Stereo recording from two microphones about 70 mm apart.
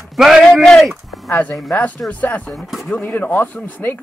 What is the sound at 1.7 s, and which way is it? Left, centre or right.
Speech, centre.